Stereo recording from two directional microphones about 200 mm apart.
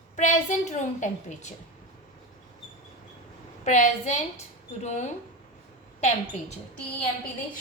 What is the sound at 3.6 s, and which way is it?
A woman's voice, 35° left (ahead or behind).